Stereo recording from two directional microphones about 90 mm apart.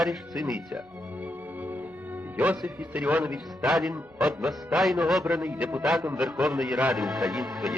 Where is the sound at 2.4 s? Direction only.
15° right (ahead or behind).